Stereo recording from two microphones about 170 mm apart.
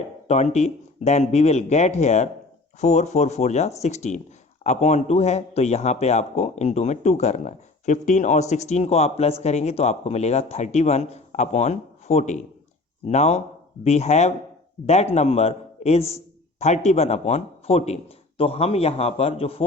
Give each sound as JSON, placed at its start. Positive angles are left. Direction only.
{"t": 0.3, "sound": "speech", "side_deg": 40}